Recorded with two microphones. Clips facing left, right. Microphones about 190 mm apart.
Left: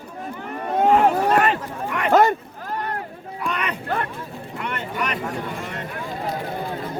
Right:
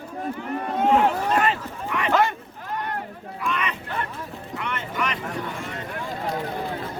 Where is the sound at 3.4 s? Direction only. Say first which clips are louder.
Left 1 dB; 40° left (ahead or behind).